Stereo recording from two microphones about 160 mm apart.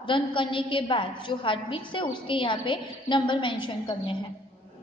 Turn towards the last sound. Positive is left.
turn(degrees=30)  # may be behind; listen again after turning